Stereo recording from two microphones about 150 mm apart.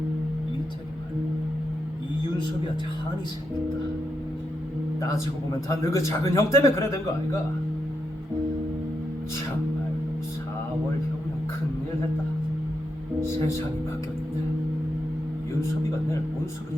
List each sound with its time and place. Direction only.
4.9 s a man's voice: 20° left (ahead or behind)